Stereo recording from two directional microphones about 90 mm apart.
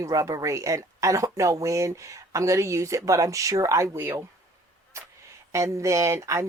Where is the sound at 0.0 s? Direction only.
40° right (ahead or behind).